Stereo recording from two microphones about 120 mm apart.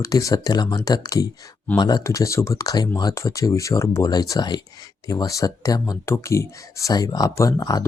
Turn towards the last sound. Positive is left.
turn(degrees=30)  # may be behind; listen again after turning